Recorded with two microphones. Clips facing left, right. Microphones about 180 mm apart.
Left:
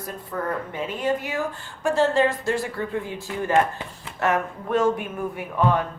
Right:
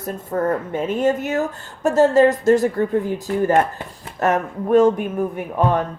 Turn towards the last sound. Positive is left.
turn(degrees=-45)  # may be behind; listen again after turning